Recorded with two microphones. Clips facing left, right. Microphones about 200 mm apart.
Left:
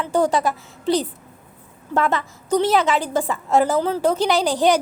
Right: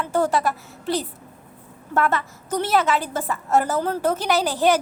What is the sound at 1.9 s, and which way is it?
A woman's voice, 15° left (ahead or behind).